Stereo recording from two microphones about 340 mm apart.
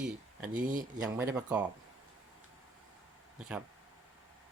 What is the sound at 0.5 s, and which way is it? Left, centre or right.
Speech, right.